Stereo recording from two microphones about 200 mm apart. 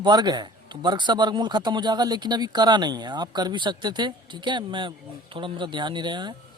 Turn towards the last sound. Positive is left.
turn(degrees=-20)  # may be behind; listen again after turning